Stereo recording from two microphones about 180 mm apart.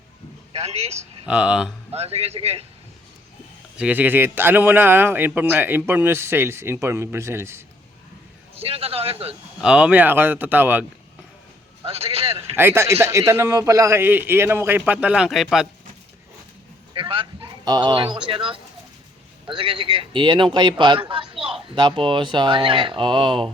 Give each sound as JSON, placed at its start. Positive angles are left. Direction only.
{"t": 0.5, "sound": "speech", "side_deg": -35}
{"t": 1.3, "sound": "speech", "side_deg": -5}
{"t": 2.0, "sound": "speech", "side_deg": -35}
{"t": 3.8, "sound": "a man's voice", "side_deg": -10}
{"t": 8.5, "sound": "speech", "side_deg": -30}
{"t": 9.6, "sound": "a man's voice", "side_deg": -5}
{"t": 11.9, "sound": "a sound", "side_deg": -35}
{"t": 12.5, "sound": "a man's voice", "side_deg": -15}
{"t": 16.9, "sound": "speech", "side_deg": -30}